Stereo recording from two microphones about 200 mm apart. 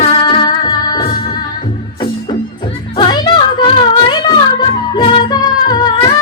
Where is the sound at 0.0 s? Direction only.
25° left (ahead or behind).